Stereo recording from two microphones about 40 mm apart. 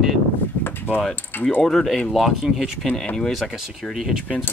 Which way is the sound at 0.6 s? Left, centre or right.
Left.